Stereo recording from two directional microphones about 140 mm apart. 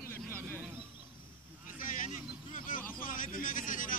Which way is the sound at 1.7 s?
70° left (ahead or behind).